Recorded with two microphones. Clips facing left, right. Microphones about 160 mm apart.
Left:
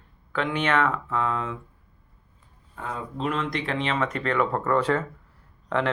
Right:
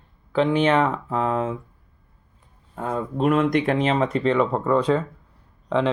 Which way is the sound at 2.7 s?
50° right (ahead or behind).